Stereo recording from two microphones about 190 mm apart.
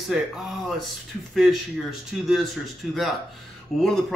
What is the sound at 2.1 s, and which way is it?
Speech, centre (ahead or behind).